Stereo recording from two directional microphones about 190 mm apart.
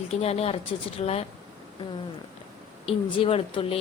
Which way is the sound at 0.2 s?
35° left (ahead or behind).